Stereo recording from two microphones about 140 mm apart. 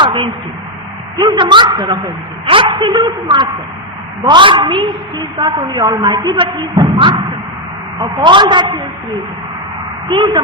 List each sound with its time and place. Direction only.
0.0 s a sound: 35° right (ahead or behind)
1.2 s a woman's voice: 30° right (ahead or behind)
8.2 s a woman's voice: 35° right (ahead or behind)
10.1 s a woman's voice: 35° right (ahead or behind)